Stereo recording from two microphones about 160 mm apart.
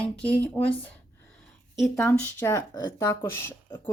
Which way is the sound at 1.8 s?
10° left (ahead or behind).